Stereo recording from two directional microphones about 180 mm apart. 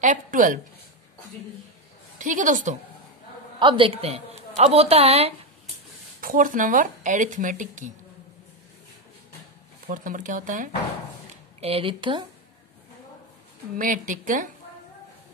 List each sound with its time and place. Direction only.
0.0 s speech: 45° right (ahead or behind)
2.1 s a woman's voice: 45° right (ahead or behind)
3.5 s a woman's voice: 30° right (ahead or behind)
6.2 s speech: 50° right (ahead or behind)
9.8 s speech: 45° right (ahead or behind)
11.6 s speech: 30° right (ahead or behind)
13.7 s speech: 45° right (ahead or behind)